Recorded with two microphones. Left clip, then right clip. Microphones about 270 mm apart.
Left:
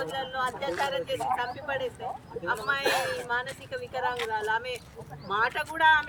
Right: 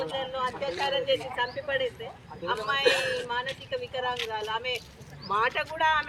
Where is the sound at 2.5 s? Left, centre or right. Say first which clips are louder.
Right 2 dB; centre.